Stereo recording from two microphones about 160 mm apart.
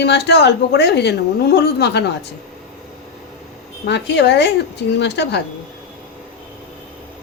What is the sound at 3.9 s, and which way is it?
A woman's voice, 90° left.